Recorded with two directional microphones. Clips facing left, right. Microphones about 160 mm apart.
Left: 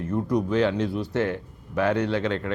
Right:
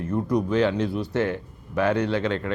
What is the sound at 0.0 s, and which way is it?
Speech, 20° right (ahead or behind).